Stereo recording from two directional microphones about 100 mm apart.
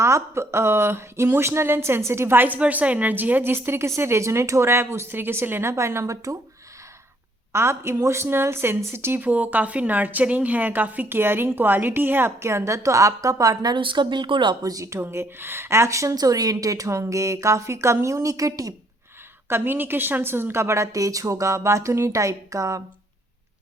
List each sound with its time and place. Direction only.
0.0 s speech: 30° right (ahead or behind)
7.5 s speech: 25° right (ahead or behind); by 14.7 s 50° right (ahead or behind)
14.7 s a woman's voice: 30° right (ahead or behind)
19.5 s a woman's voice: 20° right (ahead or behind)